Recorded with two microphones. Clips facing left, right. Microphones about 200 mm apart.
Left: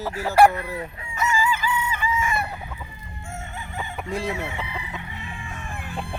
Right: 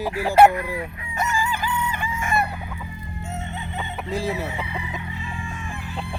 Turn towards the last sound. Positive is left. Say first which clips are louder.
# right 1 dB
turn(degrees=50)  # may be behind; listen again after turning